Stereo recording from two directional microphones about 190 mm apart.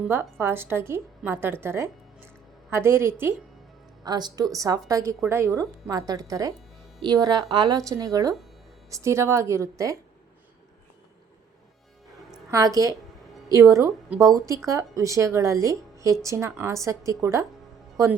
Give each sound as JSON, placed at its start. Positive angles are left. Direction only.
{"t": 0.0, "sound": "a woman's voice", "side_deg": -10}
{"t": 12.5, "sound": "a woman's voice", "side_deg": -20}